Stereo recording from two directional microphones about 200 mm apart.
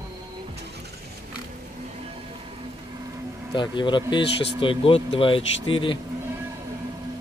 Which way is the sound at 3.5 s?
25° left (ahead or behind).